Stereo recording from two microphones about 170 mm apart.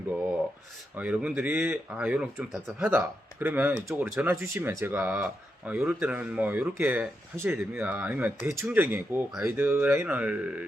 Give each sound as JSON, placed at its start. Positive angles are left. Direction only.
{"t": 0.9, "sound": "speech", "side_deg": -10}